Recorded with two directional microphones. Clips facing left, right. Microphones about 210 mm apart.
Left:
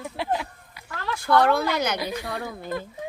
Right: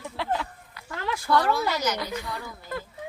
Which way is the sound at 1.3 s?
60° left (ahead or behind).